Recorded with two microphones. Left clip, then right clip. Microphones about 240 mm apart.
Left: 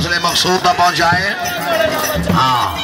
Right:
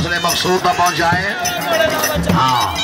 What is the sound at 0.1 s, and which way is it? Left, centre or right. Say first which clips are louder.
Speech: left 2 dB; centre.